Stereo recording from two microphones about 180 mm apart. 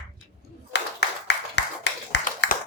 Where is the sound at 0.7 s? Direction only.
70° left (ahead or behind).